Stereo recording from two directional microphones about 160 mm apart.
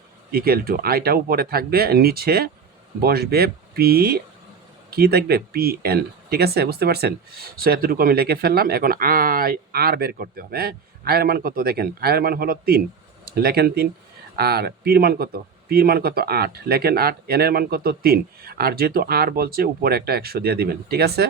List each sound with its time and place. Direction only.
0.3 s speech: 70° right (ahead or behind)